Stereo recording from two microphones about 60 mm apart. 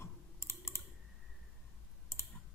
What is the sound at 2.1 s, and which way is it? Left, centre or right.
Clicking, left.